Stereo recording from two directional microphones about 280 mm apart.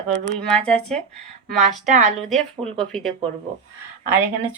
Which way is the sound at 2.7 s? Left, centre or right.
Centre.